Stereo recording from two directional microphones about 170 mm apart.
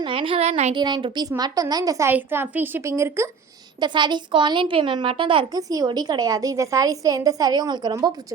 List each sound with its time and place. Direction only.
0.0 s speech: 30° right (ahead or behind)
0.8 s a child's voice: 25° right (ahead or behind)
3.8 s a child's voice: 25° right (ahead or behind)